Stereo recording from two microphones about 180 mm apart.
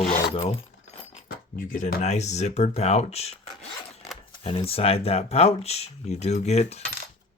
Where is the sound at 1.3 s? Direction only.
55° left (ahead or behind); by 6.8 s 35° left (ahead or behind).